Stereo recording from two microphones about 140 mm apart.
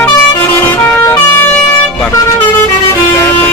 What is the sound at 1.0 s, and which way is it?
Vehicle horn, 20° left (ahead or behind).